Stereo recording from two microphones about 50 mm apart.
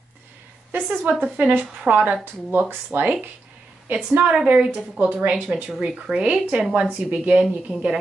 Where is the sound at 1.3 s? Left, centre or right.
Right.